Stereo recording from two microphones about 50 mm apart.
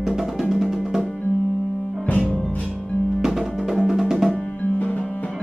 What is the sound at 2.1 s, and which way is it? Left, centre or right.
Music, left.